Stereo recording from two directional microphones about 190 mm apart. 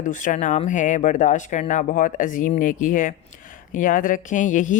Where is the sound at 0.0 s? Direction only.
45° left (ahead or behind).